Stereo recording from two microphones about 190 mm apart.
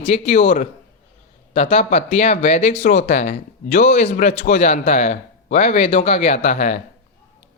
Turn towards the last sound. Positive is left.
turn(degrees=40)  # may be behind; listen again after turning